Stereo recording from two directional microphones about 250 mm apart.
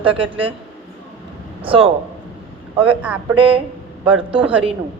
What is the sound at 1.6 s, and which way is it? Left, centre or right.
Speech, right.